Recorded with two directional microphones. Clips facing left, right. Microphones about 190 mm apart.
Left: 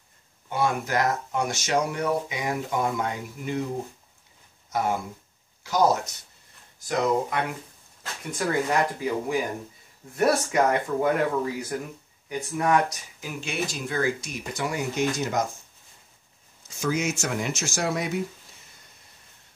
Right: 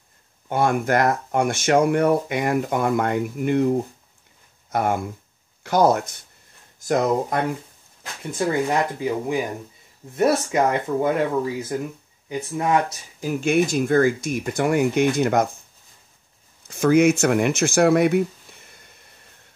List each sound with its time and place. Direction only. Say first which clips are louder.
0.5 s speech: right 6 dB; 55° right (ahead or behind)
4.6 s speech: right 4 dB; 55° right (ahead or behind)
6.9 s speech: right 4 dB; 45° right (ahead or behind)
8.0 s speech: right 5 dB; 25° right (ahead or behind)
13.2 s speech: right 11 dB; 50° right (ahead or behind)
16.6 s speech: right 11 dB; 60° right (ahead or behind)